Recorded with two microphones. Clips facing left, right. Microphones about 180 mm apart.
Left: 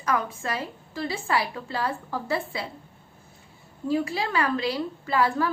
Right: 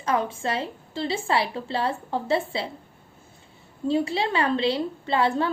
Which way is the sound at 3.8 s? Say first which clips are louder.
Right 2 dB; 25° right (ahead or behind).